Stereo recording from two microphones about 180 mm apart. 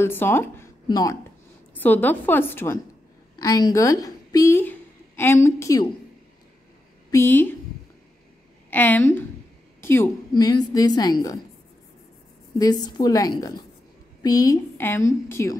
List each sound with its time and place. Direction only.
0.0 s a woman's voice: 10° left (ahead or behind)
7.1 s a woman's voice: 15° left (ahead or behind)
8.6 s a woman's voice: 10° left (ahead or behind)
12.5 s a woman's voice: 20° left (ahead or behind)